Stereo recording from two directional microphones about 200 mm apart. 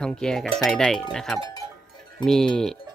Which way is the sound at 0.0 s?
5° left (ahead or behind).